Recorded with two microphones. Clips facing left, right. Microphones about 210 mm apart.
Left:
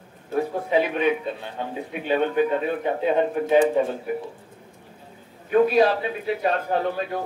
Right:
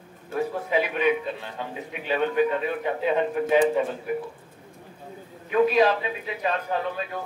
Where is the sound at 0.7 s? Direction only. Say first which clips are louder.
Left 2 dB; 35° left (ahead or behind).